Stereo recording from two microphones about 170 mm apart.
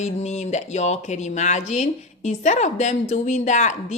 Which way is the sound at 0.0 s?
40° left (ahead or behind).